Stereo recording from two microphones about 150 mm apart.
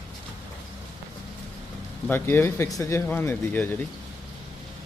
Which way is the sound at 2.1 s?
15° left (ahead or behind).